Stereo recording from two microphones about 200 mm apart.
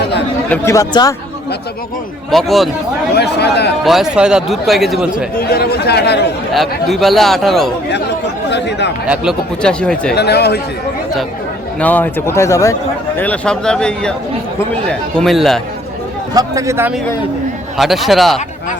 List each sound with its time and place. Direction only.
0.5 s speech: 15° left (ahead or behind)
2.3 s speech: centre (ahead or behind)
3.2 s speech: 55° left (ahead or behind)
3.8 s speech: centre (ahead or behind)
5.4 s speech: 50° left (ahead or behind)
6.5 s speech: centre (ahead or behind)
8.4 s speech: 60° left (ahead or behind)
9.0 s speech: centre (ahead or behind)
10.2 s speech: 55° left (ahead or behind)
11.8 s speech: 10° left (ahead or behind)
15.1 s speech: centre (ahead or behind)
16.3 s a man's voice: 15° right (ahead or behind)
17.7 s speech: centre (ahead or behind)